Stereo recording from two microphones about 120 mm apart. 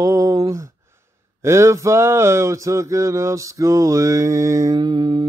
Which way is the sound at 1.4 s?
25° right (ahead or behind).